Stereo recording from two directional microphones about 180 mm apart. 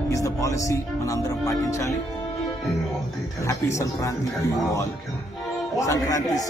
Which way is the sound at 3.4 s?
15° left (ahead or behind).